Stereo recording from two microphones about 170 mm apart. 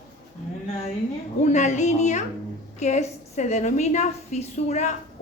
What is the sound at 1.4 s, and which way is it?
A woman's voice, 45° left (ahead or behind).